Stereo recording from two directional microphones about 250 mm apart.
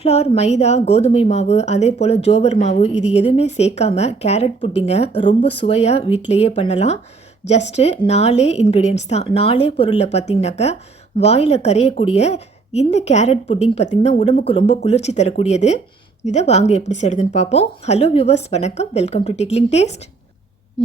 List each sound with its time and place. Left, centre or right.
0.0 s a woman's voice: left